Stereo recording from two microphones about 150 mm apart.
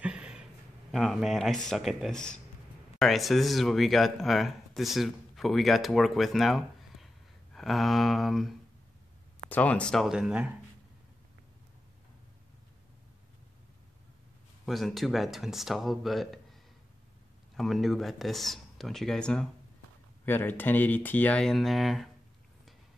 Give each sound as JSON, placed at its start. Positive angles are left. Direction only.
{"t": 0.0, "sound": "a sound", "side_deg": -5}
{"t": 0.9, "sound": "speech", "side_deg": 0}
{"t": 14.7, "sound": "speech", "side_deg": 0}
{"t": 17.6, "sound": "speech", "side_deg": 0}